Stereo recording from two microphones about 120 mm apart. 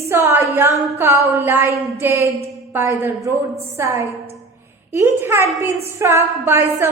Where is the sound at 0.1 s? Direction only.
20° right (ahead or behind).